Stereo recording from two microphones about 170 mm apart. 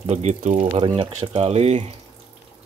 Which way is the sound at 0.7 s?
30° right (ahead or behind).